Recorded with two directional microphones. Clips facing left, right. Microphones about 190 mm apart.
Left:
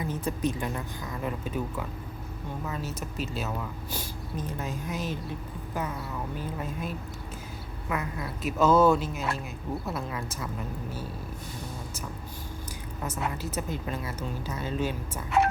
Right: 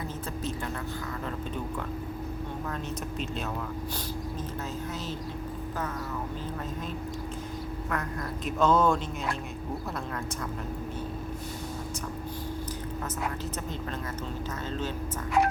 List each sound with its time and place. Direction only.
0.1 s speech: 15° left (ahead or behind)
2.6 s a man's voice: 5° left (ahead or behind)
7.9 s a man's voice: 5° left (ahead or behind)
13.4 s speech: 10° left (ahead or behind)